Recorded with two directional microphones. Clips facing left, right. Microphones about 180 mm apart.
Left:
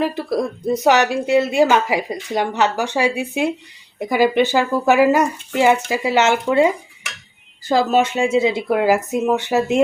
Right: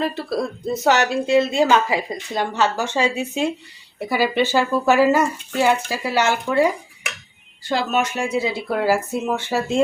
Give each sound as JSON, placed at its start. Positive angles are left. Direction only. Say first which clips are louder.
{"t": 0.0, "sound": "a woman's voice", "louder": "left 3 dB", "side_deg": 15}
{"t": 7.9, "sound": "a woman's voice", "louder": "left 5 dB", "side_deg": 30}